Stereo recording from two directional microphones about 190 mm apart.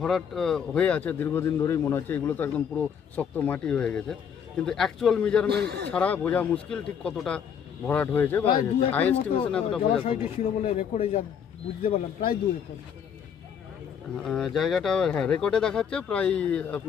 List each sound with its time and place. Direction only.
0.0 s speech: centre (ahead or behind)
5.5 s a man's voice: 60° right (ahead or behind)
5.9 s speech: 5° left (ahead or behind)
9.9 s speech: 30° left (ahead or behind)
14.2 s speech: centre (ahead or behind)